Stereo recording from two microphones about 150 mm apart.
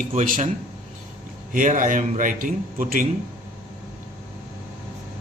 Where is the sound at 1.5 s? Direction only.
60° right (ahead or behind).